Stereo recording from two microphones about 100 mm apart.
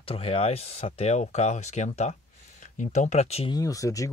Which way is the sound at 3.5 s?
35° left (ahead or behind).